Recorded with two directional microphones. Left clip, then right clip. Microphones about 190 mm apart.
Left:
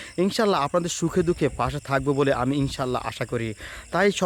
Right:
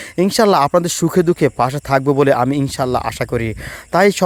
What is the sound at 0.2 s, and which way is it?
Speech, 40° right (ahead or behind).